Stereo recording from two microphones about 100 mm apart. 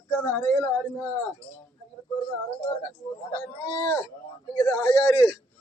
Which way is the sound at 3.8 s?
25° left (ahead or behind).